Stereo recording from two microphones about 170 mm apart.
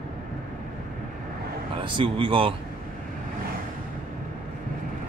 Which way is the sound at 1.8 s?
30° right (ahead or behind).